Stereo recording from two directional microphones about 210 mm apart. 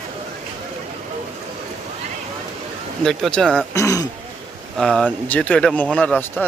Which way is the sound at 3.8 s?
15° left (ahead or behind).